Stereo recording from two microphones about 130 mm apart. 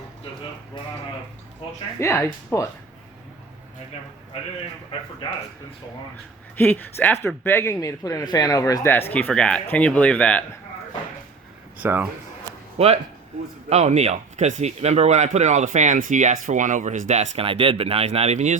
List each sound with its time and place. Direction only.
2.0 s speech: 20° left (ahead or behind)
6.6 s speech: 15° left (ahead or behind)
11.8 s speech: 15° right (ahead or behind)
13.7 s speech: 60° right (ahead or behind)
17.3 s speech: 45° right (ahead or behind)